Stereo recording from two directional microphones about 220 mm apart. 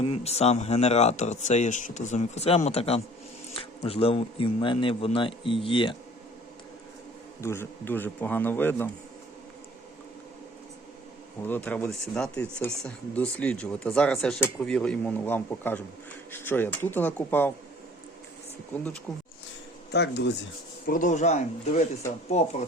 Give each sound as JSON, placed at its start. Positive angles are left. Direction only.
{"t": 0.0, "sound": "a man's voice", "side_deg": 25}
{"t": 7.4, "sound": "speech", "side_deg": 10}
{"t": 11.4, "sound": "speech", "side_deg": 10}
{"t": 19.1, "sound": "speech", "side_deg": 0}
{"t": 19.9, "sound": "speech", "side_deg": 50}
{"t": 20.8, "sound": "a man's voice", "side_deg": 35}